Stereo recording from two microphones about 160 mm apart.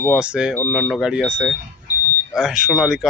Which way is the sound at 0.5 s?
5° left (ahead or behind).